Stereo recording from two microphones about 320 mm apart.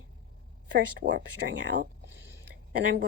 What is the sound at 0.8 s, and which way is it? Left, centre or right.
Speech, right.